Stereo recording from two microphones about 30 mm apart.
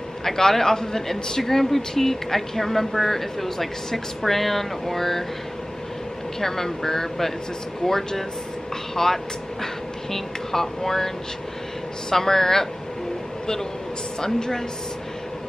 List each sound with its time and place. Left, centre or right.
0.2 s speech: centre
6.4 s speech: centre
12.1 s speech: centre
14.2 s speech: left